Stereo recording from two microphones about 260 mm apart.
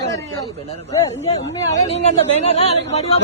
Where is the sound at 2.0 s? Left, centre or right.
Left.